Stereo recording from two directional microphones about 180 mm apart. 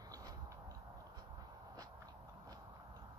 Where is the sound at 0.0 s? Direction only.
20° right (ahead or behind).